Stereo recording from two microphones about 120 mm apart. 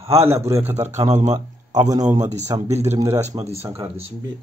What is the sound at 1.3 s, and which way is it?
Speech, 30° right (ahead or behind).